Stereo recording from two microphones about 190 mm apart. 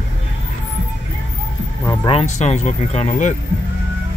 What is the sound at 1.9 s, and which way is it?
Speech, 30° left (ahead or behind).